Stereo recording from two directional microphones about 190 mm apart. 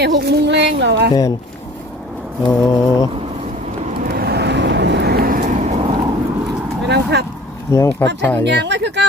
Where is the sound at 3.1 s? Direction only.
30° right (ahead or behind).